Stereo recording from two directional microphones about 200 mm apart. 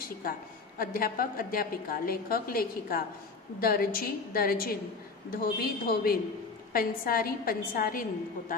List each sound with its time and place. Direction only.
0.7 s a woman's voice: 45° left (ahead or behind)